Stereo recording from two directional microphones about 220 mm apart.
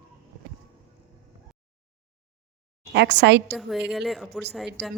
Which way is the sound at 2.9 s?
50° right (ahead or behind).